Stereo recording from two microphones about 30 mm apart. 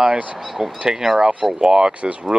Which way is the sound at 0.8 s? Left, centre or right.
Centre.